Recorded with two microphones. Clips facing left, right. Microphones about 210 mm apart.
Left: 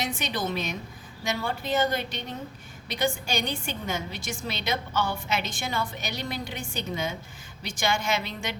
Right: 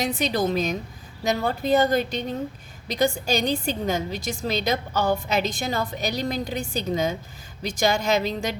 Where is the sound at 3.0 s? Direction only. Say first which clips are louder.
Right 5 dB; 40° right (ahead or behind).